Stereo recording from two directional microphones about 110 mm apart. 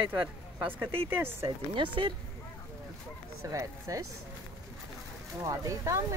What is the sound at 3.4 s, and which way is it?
Speech, 30° right (ahead or behind).